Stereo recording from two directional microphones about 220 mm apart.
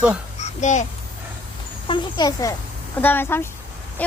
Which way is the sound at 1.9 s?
20° left (ahead or behind).